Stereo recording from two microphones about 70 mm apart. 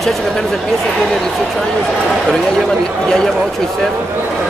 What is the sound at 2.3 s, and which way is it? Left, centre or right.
Speech, centre.